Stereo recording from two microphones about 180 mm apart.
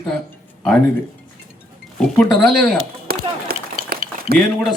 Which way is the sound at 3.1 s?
60° right (ahead or behind).